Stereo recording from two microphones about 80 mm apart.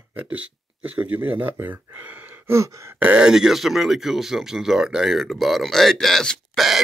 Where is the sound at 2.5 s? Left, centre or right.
Right.